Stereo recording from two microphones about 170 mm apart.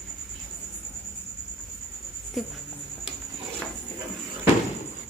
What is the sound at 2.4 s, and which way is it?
Speech, centre (ahead or behind).